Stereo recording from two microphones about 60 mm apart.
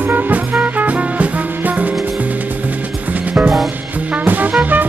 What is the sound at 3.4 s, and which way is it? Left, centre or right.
Music, centre.